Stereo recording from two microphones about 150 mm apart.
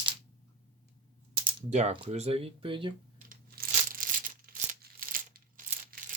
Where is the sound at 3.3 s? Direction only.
75° right (ahead or behind).